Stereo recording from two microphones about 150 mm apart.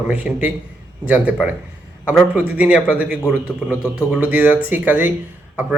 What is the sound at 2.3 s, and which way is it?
Speech, 10° right (ahead or behind).